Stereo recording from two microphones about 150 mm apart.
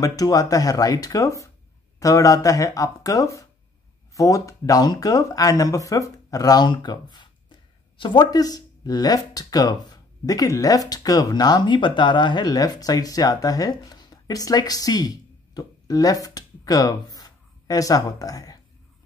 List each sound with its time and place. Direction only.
0.0 s speech: 25° left (ahead or behind)